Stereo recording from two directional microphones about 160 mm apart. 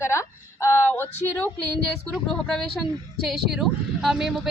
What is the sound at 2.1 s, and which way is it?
Speech, centre (ahead or behind).